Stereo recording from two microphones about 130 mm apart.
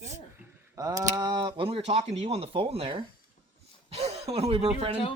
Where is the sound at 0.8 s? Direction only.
30° right (ahead or behind); by 5.0 s 45° right (ahead or behind).